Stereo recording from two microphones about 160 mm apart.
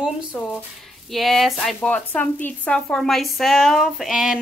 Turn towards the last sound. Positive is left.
turn(degrees=-5)  # may be behind; listen again after turning